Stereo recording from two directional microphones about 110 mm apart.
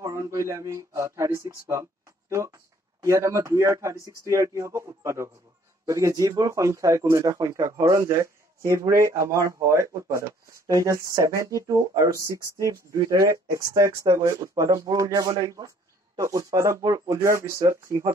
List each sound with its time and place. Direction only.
0.0 s speech: 30° right (ahead or behind)